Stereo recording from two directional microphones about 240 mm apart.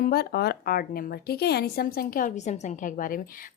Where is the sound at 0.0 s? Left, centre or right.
Left.